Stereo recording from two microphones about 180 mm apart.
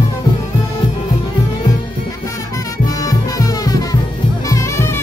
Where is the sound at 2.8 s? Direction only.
20° left (ahead or behind).